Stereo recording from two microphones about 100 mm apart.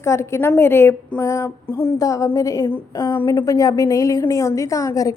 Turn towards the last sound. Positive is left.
turn(degrees=35)  # may be behind; listen again after turning